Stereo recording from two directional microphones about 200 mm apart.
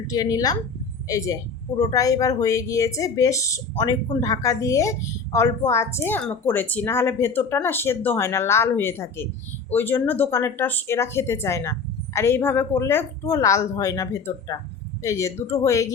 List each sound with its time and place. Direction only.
0.1 s speech: 20° left (ahead or behind)